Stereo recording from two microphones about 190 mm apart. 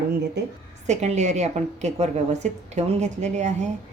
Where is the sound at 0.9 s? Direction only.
35° right (ahead or behind).